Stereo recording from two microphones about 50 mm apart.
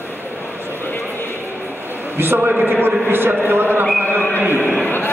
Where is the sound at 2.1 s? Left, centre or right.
Right.